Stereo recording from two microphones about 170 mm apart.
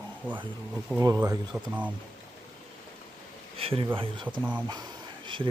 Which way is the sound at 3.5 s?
35° right (ahead or behind).